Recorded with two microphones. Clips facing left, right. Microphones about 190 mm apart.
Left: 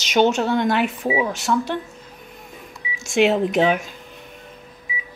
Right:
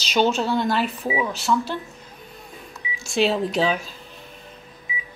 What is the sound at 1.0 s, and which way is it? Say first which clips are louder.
Speech: left 3 dB; 15° left (ahead or behind).